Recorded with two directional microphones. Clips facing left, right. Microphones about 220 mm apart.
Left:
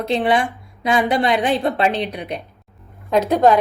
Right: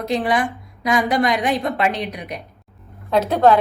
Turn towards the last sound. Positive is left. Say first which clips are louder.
# left 1 dB
turn(degrees=15)  # may be behind; listen again after turning